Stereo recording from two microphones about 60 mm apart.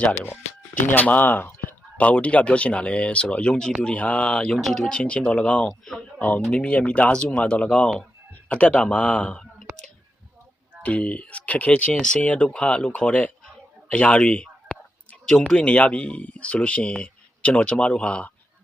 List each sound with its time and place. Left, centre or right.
0.1 s speech: left
2.0 s speech: left
4.5 s speech: centre
4.9 s speech: centre
5.6 s speech: centre
6.1 s speech: left
10.8 s speech: left
11.9 s speech: centre